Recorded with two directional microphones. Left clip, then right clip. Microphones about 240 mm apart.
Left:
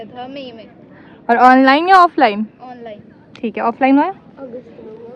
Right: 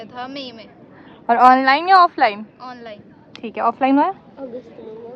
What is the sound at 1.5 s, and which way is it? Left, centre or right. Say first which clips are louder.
A woman's voice: left 3 dB; centre.